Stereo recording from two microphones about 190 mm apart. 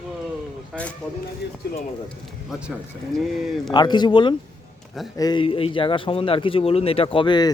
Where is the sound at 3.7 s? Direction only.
20° left (ahead or behind).